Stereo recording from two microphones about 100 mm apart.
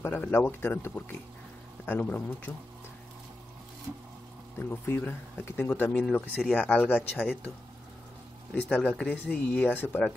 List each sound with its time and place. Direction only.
0.0 s speech: 20° left (ahead or behind)
4.6 s speech: 20° left (ahead or behind)
8.6 s speech: 10° left (ahead or behind)